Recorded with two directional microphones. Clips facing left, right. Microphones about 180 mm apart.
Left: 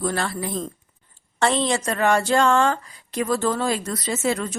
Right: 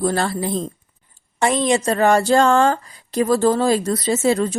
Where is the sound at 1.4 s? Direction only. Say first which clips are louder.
Right 3 dB; 15° right (ahead or behind).